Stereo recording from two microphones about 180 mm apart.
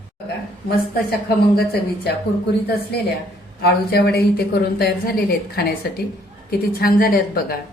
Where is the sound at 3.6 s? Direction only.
60° left (ahead or behind).